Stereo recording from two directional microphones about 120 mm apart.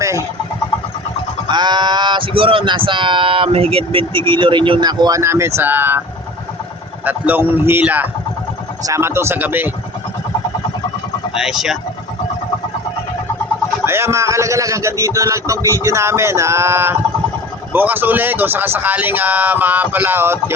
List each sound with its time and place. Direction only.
1.5 s speech: 40° right (ahead or behind)
5.2 s a man's voice: 20° right (ahead or behind)
7.0 s a man's voice: 15° right (ahead or behind)
11.3 s speech: 5° right (ahead or behind)
13.8 s a man's voice: 20° right (ahead or behind)